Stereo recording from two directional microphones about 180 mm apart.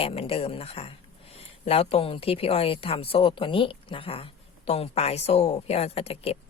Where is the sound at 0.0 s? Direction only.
30° left (ahead or behind).